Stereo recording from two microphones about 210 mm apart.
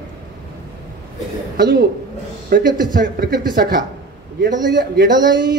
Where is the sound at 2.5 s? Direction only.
40° right (ahead or behind).